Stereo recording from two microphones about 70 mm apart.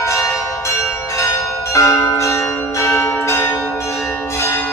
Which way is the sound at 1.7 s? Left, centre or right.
Left.